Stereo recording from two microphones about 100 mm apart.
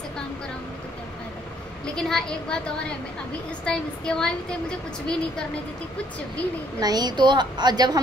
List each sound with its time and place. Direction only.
2.0 s a woman's voice: 5° left (ahead or behind)
3.6 s a woman's voice: 5° left (ahead or behind)
6.8 s a woman's voice: 40° right (ahead or behind)